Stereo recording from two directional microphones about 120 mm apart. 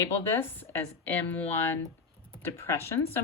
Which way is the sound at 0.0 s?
20° left (ahead or behind).